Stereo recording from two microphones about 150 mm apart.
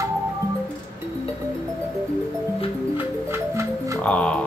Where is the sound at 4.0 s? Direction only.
10° left (ahead or behind).